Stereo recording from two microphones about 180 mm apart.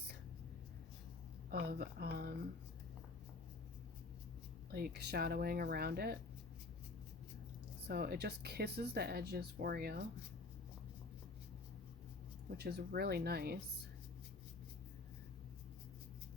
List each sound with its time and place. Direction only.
1.5 s speech: 60° right (ahead or behind)
4.7 s speech: 65° right (ahead or behind)
7.9 s speech: 60° right (ahead or behind)
12.5 s speech: 65° right (ahead or behind)